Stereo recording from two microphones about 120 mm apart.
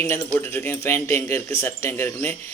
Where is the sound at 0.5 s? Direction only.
20° left (ahead or behind).